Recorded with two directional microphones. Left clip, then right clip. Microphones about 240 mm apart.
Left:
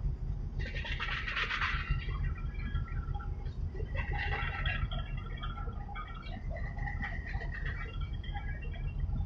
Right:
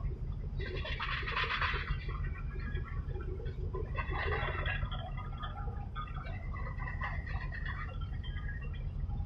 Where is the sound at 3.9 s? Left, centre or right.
Left.